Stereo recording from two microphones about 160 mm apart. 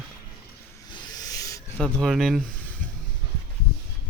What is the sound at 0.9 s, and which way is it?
Rub, 25° left (ahead or behind).